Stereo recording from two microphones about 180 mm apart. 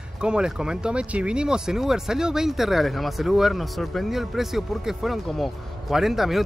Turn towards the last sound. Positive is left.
turn(degrees=0)  # may be behind; listen again after turning